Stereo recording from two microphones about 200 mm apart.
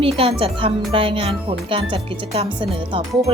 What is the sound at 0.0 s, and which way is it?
Speech, 30° right (ahead or behind).